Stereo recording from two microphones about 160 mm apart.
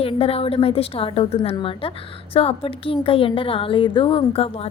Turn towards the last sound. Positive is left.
turn(degrees=40)  # may be behind; listen again after turning